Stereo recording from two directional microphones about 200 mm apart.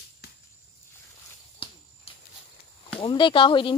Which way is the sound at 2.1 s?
30° left (ahead or behind).